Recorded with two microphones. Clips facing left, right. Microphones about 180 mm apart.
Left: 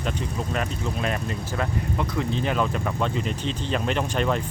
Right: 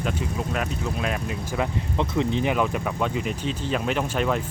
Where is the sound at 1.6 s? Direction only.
20° right (ahead or behind).